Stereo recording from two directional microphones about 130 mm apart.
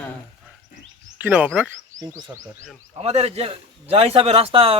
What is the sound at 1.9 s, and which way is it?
Frog, 75° right (ahead or behind).